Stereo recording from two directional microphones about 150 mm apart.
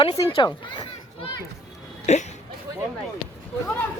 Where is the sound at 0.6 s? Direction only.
30° left (ahead or behind).